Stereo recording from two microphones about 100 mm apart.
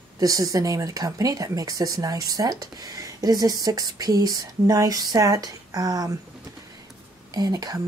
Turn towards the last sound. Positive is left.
turn(degrees=-40)  # may be behind; listen again after turning